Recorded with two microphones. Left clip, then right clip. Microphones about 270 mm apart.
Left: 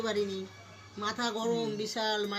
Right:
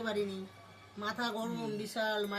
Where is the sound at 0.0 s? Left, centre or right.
Centre.